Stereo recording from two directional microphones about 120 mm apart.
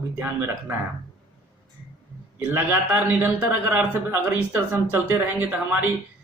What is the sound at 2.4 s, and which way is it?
A man's voice, 15° right (ahead or behind).